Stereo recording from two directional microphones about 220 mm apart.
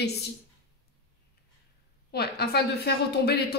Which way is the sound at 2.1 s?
45° left (ahead or behind).